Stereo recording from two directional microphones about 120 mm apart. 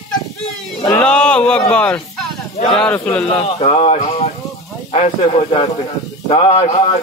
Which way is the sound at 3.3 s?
55° left (ahead or behind).